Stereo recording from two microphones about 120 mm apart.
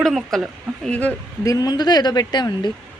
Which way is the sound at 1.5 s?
35° left (ahead or behind).